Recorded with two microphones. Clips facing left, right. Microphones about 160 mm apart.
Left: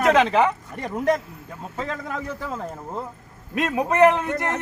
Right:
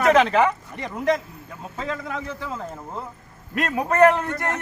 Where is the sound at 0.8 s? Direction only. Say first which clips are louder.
Left 1 dB; 45° left (ahead or behind).